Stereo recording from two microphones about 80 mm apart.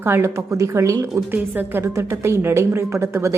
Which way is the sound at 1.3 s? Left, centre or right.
Right.